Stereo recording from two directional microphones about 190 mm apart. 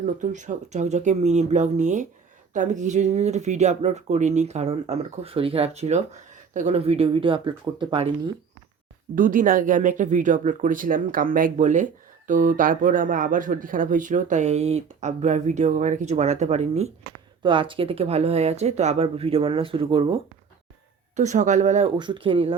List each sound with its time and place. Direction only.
0.0 s speech: 40° right (ahead or behind)
9.1 s speech: 45° right (ahead or behind); by 20.1 s 30° right (ahead or behind)
21.2 s speech: 40° right (ahead or behind)
21.9 s speech: 25° right (ahead or behind)